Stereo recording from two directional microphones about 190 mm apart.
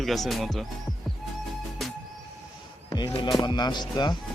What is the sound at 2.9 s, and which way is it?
Music, 15° left (ahead or behind).